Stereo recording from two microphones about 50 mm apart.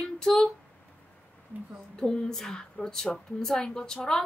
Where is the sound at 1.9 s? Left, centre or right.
Centre.